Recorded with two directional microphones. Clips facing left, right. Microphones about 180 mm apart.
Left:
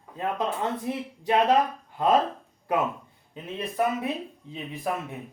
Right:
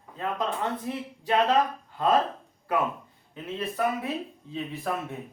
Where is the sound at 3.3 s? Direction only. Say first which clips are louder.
Even; 15° left (ahead or behind).